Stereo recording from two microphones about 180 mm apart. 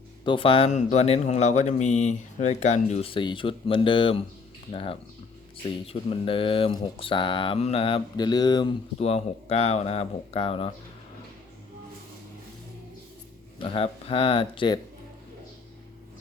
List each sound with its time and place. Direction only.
0.3 s speech: 30° left (ahead or behind)
3.2 s speech: 25° left (ahead or behind)
9.0 s speech: 35° left (ahead or behind)
13.6 s speech: 30° left (ahead or behind)